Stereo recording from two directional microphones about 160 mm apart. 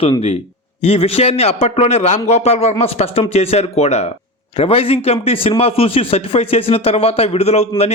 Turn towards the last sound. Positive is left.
turn(degrees=40)  # may be behind; listen again after turning